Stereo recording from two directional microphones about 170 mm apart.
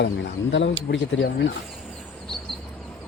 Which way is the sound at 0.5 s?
90° left.